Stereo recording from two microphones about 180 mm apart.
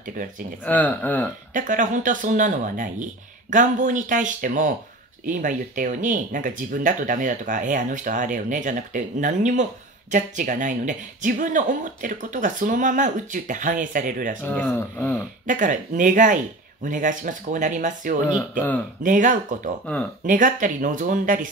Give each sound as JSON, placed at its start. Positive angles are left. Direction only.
{"t": 0.0, "sound": "speech", "side_deg": -50}
{"t": 0.7, "sound": "speech", "side_deg": 10}
{"t": 1.5, "sound": "speech", "side_deg": -45}
{"t": 14.4, "sound": "speech", "side_deg": 10}
{"t": 15.4, "sound": "speech", "side_deg": -45}